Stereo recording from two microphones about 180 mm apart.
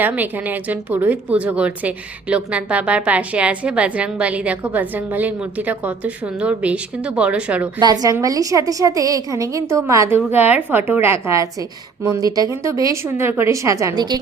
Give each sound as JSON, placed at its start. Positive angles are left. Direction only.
{"t": 0.0, "sound": "a woman's voice", "side_deg": -10}
{"t": 8.0, "sound": "a woman's voice", "side_deg": -20}